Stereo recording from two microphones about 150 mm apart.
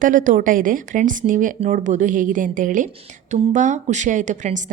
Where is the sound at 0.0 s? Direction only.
60° right (ahead or behind).